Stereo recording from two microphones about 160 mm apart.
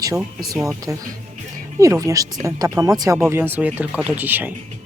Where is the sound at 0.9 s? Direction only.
20° right (ahead or behind).